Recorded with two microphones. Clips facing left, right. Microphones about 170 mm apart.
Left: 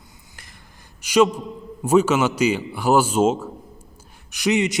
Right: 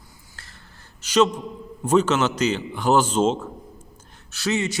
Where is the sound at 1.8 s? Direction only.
10° left (ahead or behind).